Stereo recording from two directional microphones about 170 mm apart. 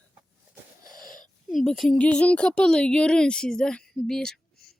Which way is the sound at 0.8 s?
55° left (ahead or behind).